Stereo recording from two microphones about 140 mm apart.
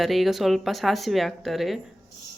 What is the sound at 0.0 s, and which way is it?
Speech, centre (ahead or behind).